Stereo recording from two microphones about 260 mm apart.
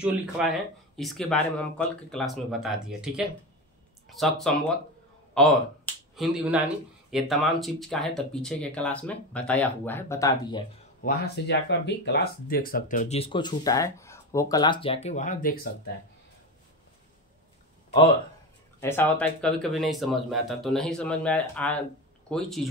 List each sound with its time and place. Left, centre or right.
0.0 s speech: centre
11.0 s speech: left
18.8 s speech: centre